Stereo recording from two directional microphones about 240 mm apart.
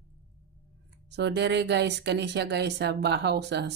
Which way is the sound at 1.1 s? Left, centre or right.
Right.